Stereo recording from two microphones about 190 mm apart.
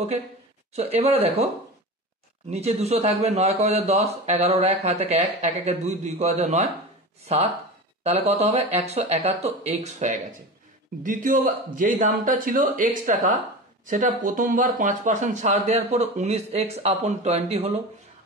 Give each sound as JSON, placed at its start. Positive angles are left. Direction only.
{"t": 0.7, "sound": "a man's voice", "side_deg": -35}
{"t": 2.5, "sound": "a man's voice", "side_deg": -35}
{"t": 8.0, "sound": "a man's voice", "side_deg": -35}